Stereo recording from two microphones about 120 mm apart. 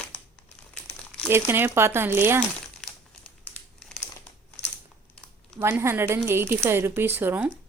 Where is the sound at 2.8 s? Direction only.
5° left (ahead or behind).